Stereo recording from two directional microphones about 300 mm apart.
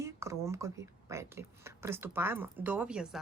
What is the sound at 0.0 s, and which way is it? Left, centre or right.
Speech, centre.